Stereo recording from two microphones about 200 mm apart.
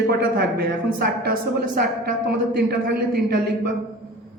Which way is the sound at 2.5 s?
55° right (ahead or behind).